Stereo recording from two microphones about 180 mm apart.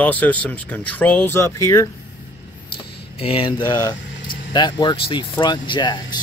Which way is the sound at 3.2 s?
30° left (ahead or behind).